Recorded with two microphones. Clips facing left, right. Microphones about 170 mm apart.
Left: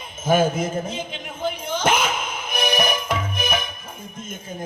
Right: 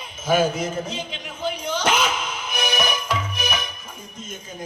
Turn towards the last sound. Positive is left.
turn(degrees=50)  # may be behind; listen again after turning